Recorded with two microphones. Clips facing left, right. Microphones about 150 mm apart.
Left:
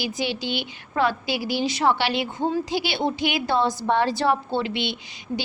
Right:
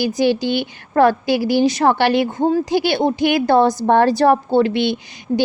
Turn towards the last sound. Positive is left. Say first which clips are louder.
# right 9 dB
turn(degrees=-45)  # may be behind; listen again after turning